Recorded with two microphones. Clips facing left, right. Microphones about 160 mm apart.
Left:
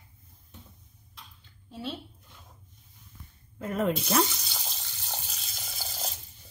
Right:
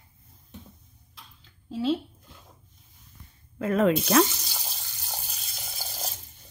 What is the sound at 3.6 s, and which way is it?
Speech, 90° right.